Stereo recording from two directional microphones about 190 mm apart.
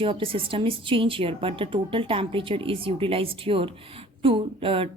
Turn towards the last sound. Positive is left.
turn(degrees=-30)  # may be behind; listen again after turning